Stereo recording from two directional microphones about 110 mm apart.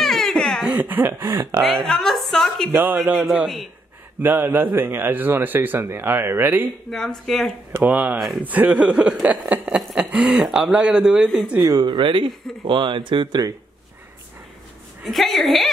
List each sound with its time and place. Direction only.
0.0 s baby laughter: 5° left (ahead or behind)
0.7 s speech: 15° right (ahead or behind)
1.6 s a woman's voice: centre (ahead or behind)
2.7 s speech: 20° right (ahead or behind)
4.2 s speech: 20° right (ahead or behind)
6.9 s a woman's voice: 5° left (ahead or behind)
7.7 s speech: 15° right (ahead or behind)
11.6 s speech: 40° right (ahead or behind)
15.0 s a woman's voice: centre (ahead or behind)